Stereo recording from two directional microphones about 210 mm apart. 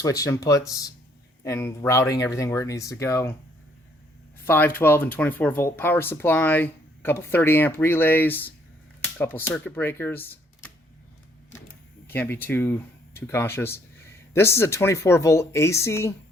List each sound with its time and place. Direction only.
0.0 s speech: 15° left (ahead or behind)
4.4 s speech: 10° left (ahead or behind)
12.0 s speech: 10° left (ahead or behind)